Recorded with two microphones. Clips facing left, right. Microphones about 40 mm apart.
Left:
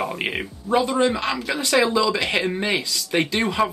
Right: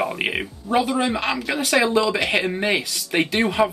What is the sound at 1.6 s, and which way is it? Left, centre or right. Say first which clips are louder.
Speech: even; right.